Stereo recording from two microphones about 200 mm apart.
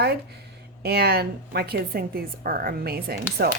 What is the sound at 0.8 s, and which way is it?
Speech, 55° right (ahead or behind).